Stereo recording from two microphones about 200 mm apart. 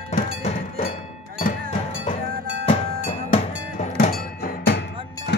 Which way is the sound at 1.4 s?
40° left (ahead or behind).